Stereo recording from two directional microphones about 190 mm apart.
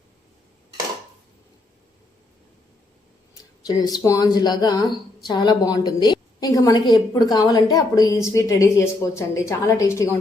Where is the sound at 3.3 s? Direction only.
20° left (ahead or behind).